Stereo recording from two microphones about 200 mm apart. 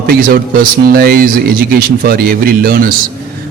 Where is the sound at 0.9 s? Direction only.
50° right (ahead or behind).